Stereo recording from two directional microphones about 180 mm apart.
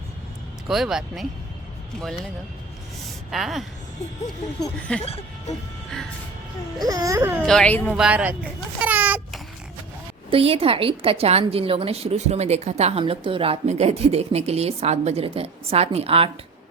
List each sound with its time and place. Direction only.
0.7 s speech: centre (ahead or behind)
3.3 s speech: centre (ahead or behind)
4.8 s speech: 5° left (ahead or behind)
5.0 s speech: 35° left (ahead or behind)
6.8 s baby cry: 20° right (ahead or behind)
7.4 s speech: 5° left (ahead or behind)
7.9 s baby cry: 5° right (ahead or behind)
8.8 s a sound: 10° right (ahead or behind)
10.2 s a woman's voice: 30° right (ahead or behind)